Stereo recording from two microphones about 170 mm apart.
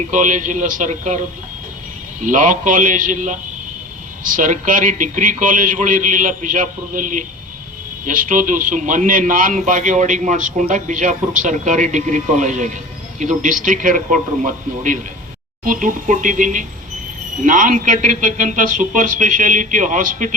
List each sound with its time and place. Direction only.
0.1 s a man's voice: 50° right (ahead or behind)
2.2 s a man's voice: 50° right (ahead or behind)